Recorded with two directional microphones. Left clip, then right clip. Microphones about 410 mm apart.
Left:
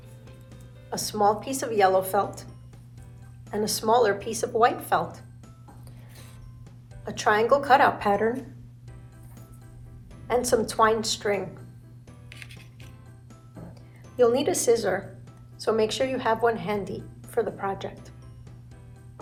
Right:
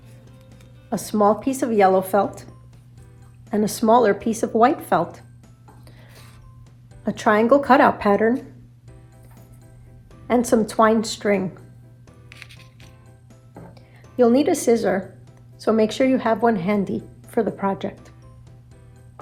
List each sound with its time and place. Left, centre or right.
0.9 s speech: centre
3.5 s a woman's voice: centre
7.1 s a woman's voice: centre
10.2 s speech: centre
12.3 s music: centre
14.2 s a woman's voice: right